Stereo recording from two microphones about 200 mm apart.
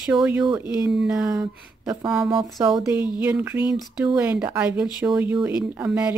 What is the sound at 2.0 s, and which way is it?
Speech, 5° right (ahead or behind).